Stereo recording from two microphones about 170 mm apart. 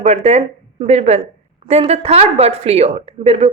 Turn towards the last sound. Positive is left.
turn(degrees=-40)  # may be behind; listen again after turning